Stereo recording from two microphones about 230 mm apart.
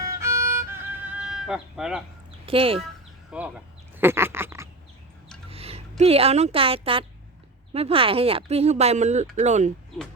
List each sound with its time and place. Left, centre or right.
0.0 s violin: centre
2.5 s speech: right
3.3 s speech: centre
3.9 s a sound: centre
5.5 s a sound: right
6.0 s speech: right